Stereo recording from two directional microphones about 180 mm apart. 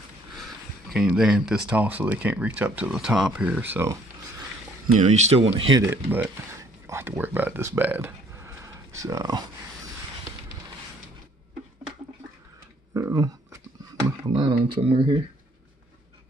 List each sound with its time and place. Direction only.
0.4 s speech: centre (ahead or behind)
4.9 s speech: 40° right (ahead or behind)
5.8 s speech: 10° right (ahead or behind)
12.9 s a sound: 15° right (ahead or behind)
14.3 s speech: 25° right (ahead or behind)